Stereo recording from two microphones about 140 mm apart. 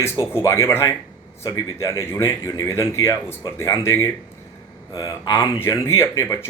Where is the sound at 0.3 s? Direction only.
20° left (ahead or behind).